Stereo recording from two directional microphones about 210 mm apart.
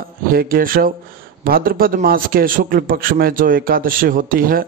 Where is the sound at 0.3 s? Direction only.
45° right (ahead or behind).